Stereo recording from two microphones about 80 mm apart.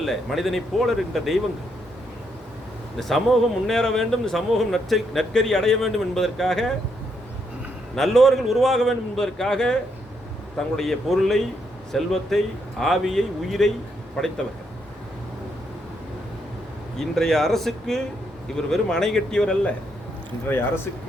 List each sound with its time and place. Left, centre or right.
0.0 s speech: centre
3.0 s speech: centre
7.9 s speech: centre
10.8 s speech: centre
17.0 s speech: centre
20.5 s speech: left